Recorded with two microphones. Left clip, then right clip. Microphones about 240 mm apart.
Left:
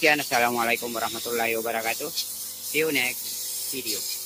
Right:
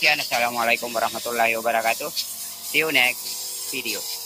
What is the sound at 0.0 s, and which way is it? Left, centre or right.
Speech, centre.